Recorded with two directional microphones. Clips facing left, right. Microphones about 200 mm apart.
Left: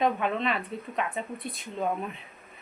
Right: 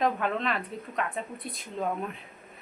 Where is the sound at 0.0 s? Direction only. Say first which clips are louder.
Left 1 dB; centre (ahead or behind).